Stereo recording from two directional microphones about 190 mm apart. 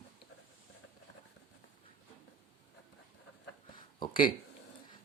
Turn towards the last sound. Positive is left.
turn(degrees=25)  # may be behind; listen again after turning